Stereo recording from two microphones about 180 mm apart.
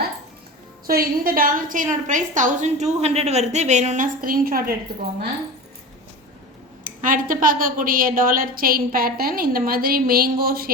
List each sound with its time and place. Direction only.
0.9 s a woman's voice: 55° right (ahead or behind)
6.8 s a woman's voice: 50° right (ahead or behind)